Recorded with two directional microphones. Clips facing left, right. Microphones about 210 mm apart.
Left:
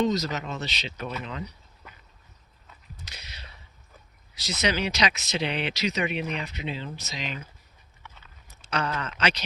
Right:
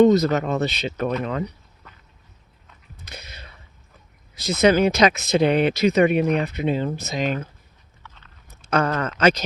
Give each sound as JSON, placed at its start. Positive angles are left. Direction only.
{"t": 0.0, "sound": "speech", "side_deg": -55}
{"t": 3.1, "sound": "a sound", "side_deg": -50}
{"t": 4.4, "sound": "speech", "side_deg": -50}
{"t": 8.0, "sound": "biting", "side_deg": 10}
{"t": 8.7, "sound": "speech", "side_deg": -50}